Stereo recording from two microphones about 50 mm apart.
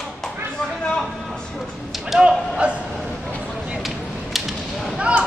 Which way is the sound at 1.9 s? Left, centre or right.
Centre.